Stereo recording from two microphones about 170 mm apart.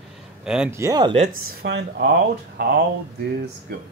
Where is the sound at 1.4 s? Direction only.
75° right (ahead or behind).